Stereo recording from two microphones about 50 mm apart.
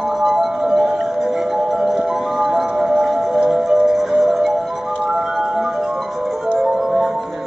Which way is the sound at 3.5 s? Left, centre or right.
Centre.